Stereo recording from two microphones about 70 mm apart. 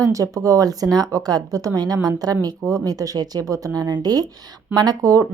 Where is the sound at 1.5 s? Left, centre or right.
Right.